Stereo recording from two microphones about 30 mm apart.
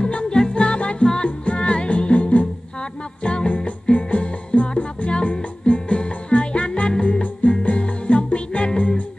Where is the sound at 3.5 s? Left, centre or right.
Left.